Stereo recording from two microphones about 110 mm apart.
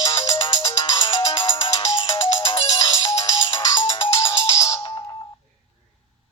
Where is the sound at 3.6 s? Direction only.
50° left (ahead or behind).